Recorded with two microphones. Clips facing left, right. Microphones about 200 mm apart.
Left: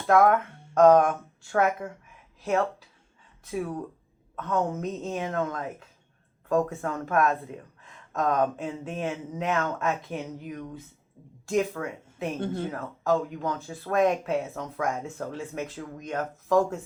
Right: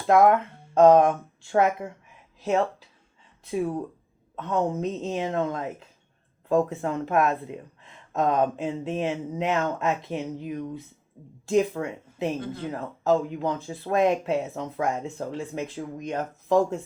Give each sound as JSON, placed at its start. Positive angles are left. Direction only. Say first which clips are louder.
{"t": 0.1, "sound": "speech", "louder": "right 2 dB", "side_deg": -20}